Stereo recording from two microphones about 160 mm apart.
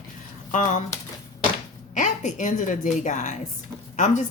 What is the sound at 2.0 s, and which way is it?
A woman's voice, 50° left (ahead or behind).